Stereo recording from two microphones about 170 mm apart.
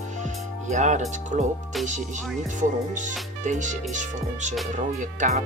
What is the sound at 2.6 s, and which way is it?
Music, 45° right (ahead or behind).